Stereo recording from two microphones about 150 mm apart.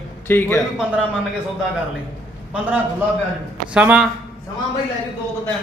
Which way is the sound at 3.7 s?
10° right (ahead or behind).